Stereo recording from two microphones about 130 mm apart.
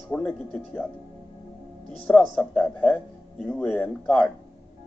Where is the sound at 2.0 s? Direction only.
5° left (ahead or behind).